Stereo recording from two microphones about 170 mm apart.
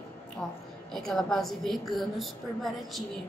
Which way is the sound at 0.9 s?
Centre (ahead or behind).